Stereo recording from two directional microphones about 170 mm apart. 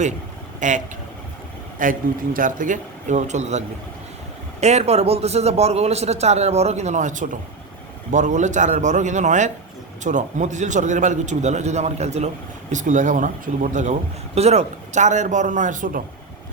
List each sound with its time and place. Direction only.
0.6 s a man's voice: 45° right (ahead or behind)
1.8 s a man's voice: 50° right (ahead or behind)
4.6 s a man's voice: 40° right (ahead or behind)